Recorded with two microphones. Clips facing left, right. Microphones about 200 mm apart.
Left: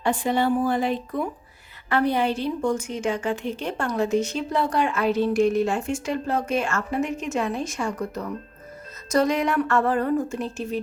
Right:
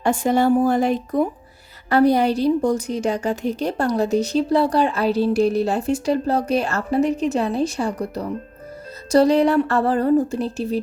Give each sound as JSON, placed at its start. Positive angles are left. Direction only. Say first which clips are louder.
{"t": 0.0, "sound": "a woman's voice", "louder": "right 5 dB", "side_deg": -45}